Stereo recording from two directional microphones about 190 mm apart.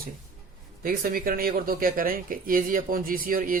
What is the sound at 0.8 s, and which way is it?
Speech, 50° right (ahead or behind).